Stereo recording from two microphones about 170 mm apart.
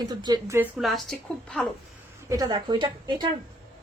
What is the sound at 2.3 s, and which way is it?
A woman's voice, 25° right (ahead or behind).